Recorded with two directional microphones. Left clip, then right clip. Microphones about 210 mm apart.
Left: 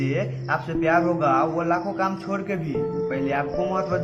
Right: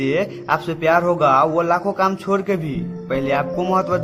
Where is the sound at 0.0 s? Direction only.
45° right (ahead or behind).